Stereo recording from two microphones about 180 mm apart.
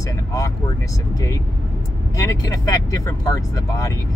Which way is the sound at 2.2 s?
20° left (ahead or behind).